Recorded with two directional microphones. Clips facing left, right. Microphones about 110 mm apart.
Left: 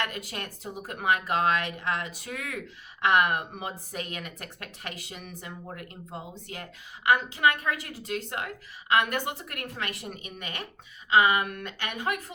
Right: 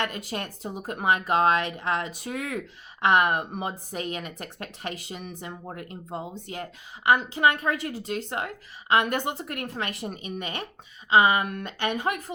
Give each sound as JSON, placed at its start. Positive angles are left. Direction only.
{"t": 0.0, "sound": "speech", "side_deg": -30}